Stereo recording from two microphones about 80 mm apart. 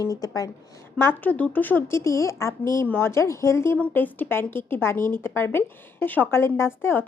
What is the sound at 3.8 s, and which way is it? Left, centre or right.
A woman's voice, left.